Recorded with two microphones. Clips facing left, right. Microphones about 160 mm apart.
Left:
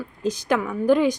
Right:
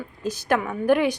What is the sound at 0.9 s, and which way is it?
Speech, 15° right (ahead or behind).